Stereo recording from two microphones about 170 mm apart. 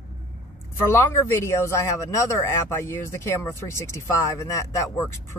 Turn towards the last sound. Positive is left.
turn(degrees=15)  # may be behind; listen again after turning